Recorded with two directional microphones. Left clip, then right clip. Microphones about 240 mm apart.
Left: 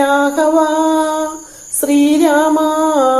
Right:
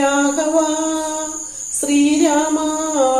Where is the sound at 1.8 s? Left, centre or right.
Left.